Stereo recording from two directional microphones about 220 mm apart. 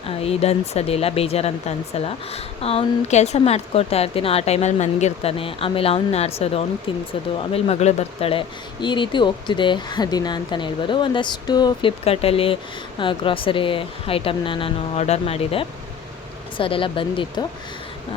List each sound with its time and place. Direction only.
0.2 s speech: 25° left (ahead or behind)